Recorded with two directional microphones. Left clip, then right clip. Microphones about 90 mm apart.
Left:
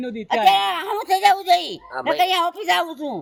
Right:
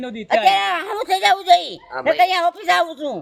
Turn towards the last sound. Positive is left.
turn(degrees=-35)  # may be behind; listen again after turning